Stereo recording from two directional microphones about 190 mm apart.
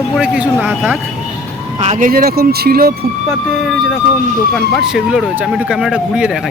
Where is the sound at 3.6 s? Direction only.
Centre (ahead or behind).